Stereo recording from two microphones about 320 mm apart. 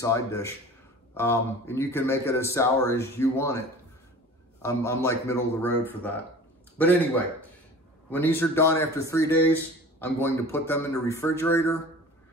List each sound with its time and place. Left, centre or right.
0.0 s a man's voice: centre
8.1 s a man's voice: centre